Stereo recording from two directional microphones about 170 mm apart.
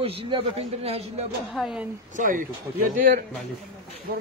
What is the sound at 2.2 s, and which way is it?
A man's voice, 50° right (ahead or behind).